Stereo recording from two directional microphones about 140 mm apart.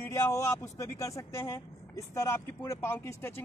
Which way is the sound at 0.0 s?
20° left (ahead or behind).